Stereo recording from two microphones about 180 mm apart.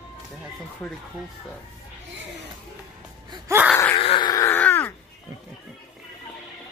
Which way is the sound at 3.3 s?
20° right (ahead or behind).